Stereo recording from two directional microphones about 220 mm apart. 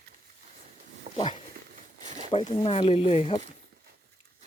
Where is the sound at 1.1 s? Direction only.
30° right (ahead or behind).